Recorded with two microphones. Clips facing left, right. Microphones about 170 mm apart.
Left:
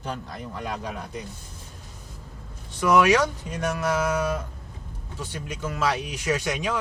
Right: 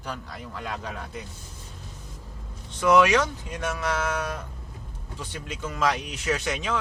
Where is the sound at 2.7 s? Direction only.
10° left (ahead or behind).